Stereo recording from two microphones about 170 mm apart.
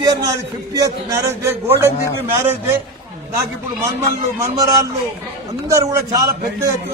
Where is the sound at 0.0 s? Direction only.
20° right (ahead or behind).